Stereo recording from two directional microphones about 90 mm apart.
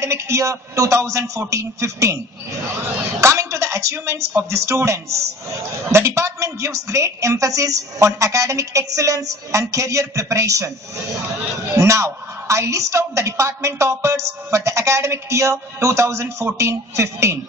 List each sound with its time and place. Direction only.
0.0 s speech: 35° right (ahead or behind)
3.2 s speech: 35° right (ahead or behind)
11.7 s speech: 35° right (ahead or behind)